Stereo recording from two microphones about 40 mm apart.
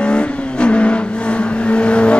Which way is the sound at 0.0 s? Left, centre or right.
Left.